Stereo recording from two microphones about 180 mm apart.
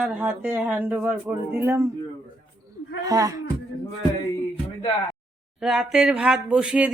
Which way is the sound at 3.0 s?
20° right (ahead or behind).